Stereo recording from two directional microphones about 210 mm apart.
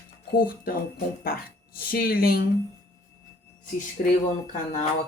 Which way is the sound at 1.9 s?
45° left (ahead or behind).